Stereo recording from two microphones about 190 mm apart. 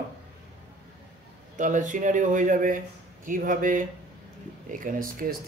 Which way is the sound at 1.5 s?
40° right (ahead or behind).